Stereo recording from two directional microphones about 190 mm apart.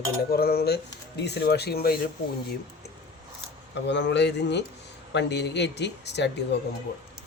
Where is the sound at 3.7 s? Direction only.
65° left (ahead or behind).